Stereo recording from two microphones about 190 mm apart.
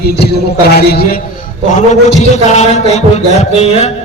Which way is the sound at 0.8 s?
55° left (ahead or behind).